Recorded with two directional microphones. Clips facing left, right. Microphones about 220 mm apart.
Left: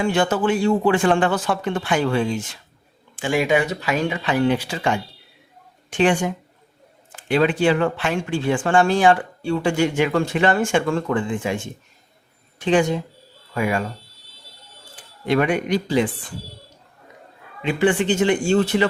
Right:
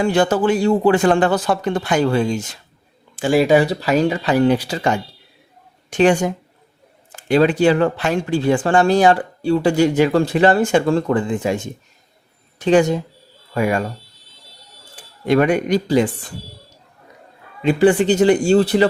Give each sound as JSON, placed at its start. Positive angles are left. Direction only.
{"t": 0.0, "sound": "speech", "side_deg": -35}
{"t": 15.3, "sound": "speech", "side_deg": -40}
{"t": 17.6, "sound": "speech", "side_deg": -40}